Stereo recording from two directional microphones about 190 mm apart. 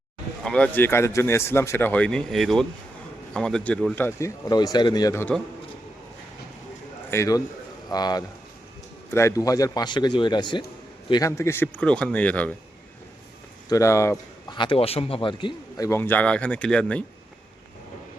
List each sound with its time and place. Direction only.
0.4 s speech: 5° left (ahead or behind)
7.1 s speech: 15° left (ahead or behind)
13.7 s speech: 15° left (ahead or behind)
15.9 s speech: 10° left (ahead or behind)